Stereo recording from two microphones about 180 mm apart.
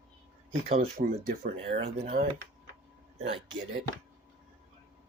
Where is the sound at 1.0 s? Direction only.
45° right (ahead or behind).